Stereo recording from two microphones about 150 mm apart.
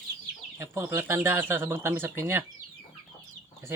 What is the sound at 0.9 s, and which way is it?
Speech, 15° right (ahead or behind).